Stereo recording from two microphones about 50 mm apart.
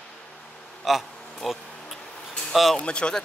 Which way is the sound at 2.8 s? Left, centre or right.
Left.